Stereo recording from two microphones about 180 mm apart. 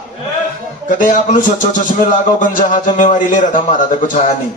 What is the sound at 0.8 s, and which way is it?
Speech, 45° left (ahead or behind).